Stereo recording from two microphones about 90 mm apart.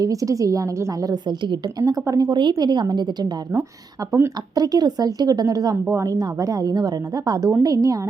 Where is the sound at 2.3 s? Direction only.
55° right (ahead or behind).